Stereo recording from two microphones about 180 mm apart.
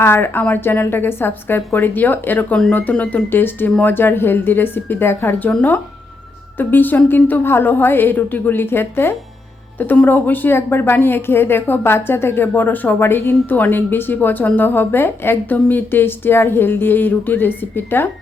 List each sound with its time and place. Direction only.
0.0 s a woman's voice: 10° left (ahead or behind)